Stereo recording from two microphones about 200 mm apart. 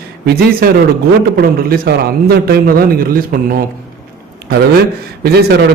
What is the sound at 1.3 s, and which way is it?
A man's voice, 50° right (ahead or behind).